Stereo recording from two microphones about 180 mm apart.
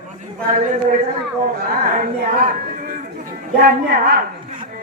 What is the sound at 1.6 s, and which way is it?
Speech, 55° right (ahead or behind).